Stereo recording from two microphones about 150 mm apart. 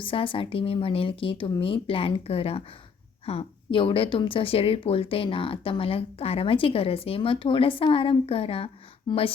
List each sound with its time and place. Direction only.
0.0 s a woman's voice: 35° left (ahead or behind)